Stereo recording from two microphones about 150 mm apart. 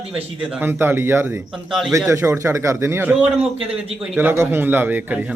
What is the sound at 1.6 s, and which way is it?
Speech, centre (ahead or behind).